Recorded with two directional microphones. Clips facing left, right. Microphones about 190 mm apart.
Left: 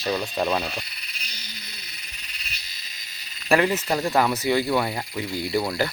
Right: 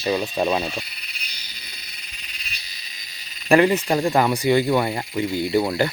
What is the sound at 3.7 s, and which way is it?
Speech, 15° right (ahead or behind).